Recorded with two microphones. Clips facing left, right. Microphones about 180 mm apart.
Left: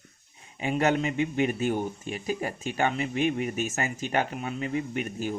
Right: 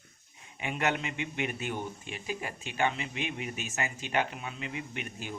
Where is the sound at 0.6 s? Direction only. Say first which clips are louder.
Left 7 dB; 35° left (ahead or behind).